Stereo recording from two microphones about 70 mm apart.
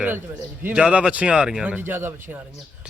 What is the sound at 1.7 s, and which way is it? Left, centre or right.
Speech, right.